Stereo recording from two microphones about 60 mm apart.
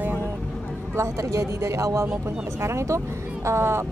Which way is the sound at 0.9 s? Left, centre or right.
Right.